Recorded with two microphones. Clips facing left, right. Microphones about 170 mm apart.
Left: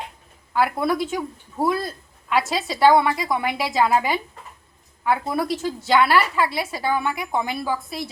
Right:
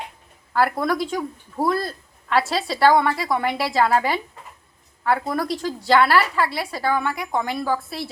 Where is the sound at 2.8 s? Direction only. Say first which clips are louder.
Left 1 dB; 5° left (ahead or behind).